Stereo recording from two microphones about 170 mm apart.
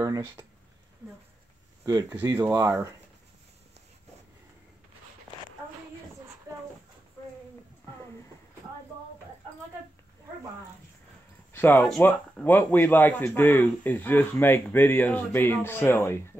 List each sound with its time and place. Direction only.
0.0 s speech: 15° right (ahead or behind)
1.9 s speech: 20° right (ahead or behind)
11.5 s a man's voice: 10° left (ahead or behind)